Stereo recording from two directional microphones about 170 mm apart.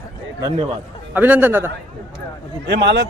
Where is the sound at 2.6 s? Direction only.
85° right.